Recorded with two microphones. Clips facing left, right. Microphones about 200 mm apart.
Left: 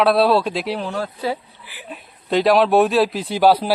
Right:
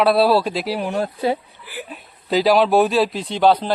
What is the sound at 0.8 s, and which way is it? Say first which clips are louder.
Speech: right 3 dB; 15° right (ahead or behind).